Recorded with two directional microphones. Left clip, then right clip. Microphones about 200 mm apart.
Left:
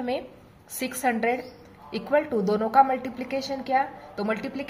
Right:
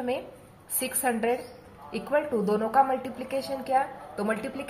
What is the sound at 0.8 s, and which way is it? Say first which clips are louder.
A woman's voice: left 2 dB; 25° left (ahead or behind).